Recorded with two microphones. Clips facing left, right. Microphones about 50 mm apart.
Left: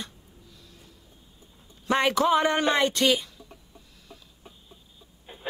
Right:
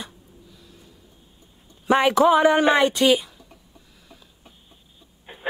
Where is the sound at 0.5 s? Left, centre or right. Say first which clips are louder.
Right 3 dB; centre.